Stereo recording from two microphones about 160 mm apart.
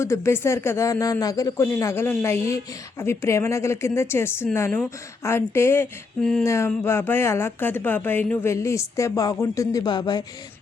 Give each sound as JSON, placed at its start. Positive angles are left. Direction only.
{"t": 0.0, "sound": "speech", "side_deg": 15}